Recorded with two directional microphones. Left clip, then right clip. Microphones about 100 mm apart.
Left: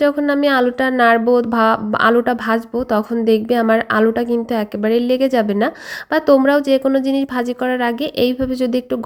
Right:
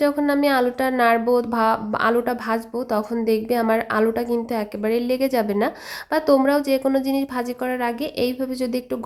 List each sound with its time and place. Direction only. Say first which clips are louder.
0.0 s a woman's voice: left 4 dB; 30° left (ahead or behind)